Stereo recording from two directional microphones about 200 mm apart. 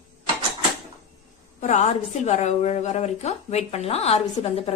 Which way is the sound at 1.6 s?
35° left (ahead or behind).